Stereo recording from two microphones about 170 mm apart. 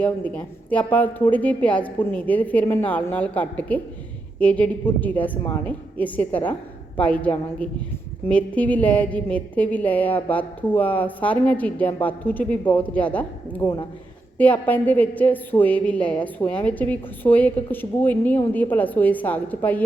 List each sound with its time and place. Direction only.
0.0 s a woman's voice: 10° left (ahead or behind)
13.6 s a woman's voice: 20° left (ahead or behind)